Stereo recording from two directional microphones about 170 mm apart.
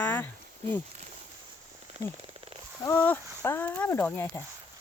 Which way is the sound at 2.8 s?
10° left (ahead or behind).